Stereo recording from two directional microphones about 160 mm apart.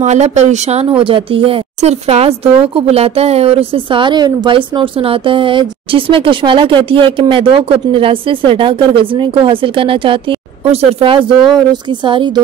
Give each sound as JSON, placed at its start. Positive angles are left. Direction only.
{"t": 0.0, "sound": "a woman's voice", "side_deg": -45}